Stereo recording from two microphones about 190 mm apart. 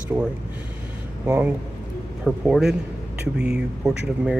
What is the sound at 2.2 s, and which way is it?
Speech, 5° right (ahead or behind).